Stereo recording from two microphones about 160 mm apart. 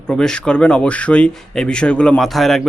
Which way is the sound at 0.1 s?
5° left (ahead or behind).